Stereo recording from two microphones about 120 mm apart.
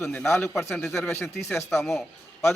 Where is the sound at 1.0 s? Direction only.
20° left (ahead or behind).